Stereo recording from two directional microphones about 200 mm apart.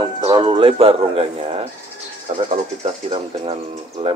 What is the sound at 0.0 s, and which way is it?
Music, 20° right (ahead or behind).